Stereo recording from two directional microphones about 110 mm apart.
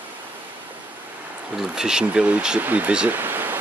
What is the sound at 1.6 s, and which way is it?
Speech, 5° right (ahead or behind).